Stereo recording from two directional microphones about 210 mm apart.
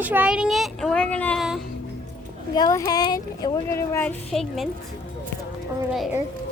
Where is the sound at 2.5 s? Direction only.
15° left (ahead or behind); by 4.6 s centre (ahead or behind).